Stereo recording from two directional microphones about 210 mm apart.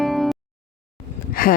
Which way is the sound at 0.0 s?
Centre (ahead or behind).